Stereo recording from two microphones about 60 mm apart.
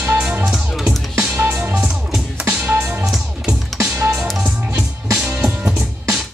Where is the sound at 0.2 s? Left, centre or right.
Centre.